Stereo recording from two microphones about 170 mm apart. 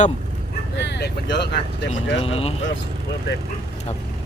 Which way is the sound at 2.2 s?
35° left (ahead or behind).